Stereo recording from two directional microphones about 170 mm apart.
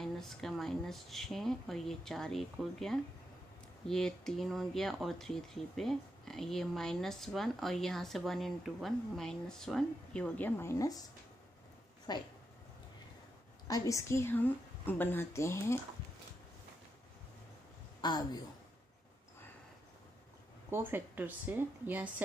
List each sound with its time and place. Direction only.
0.0 s speech: centre (ahead or behind); by 11.1 s 20° left (ahead or behind)
12.1 s speech: 25° left (ahead or behind)
13.7 s a woman's voice: 20° left (ahead or behind)
18.0 s speech: 25° left (ahead or behind)
20.7 s speech: 10° right (ahead or behind)